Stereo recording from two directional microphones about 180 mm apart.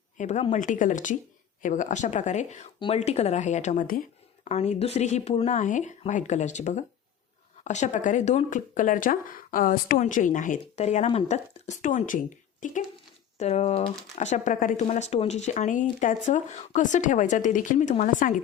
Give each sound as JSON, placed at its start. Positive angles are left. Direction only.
{"t": 0.2, "sound": "speech", "side_deg": 40}
{"t": 4.4, "sound": "speech", "side_deg": 35}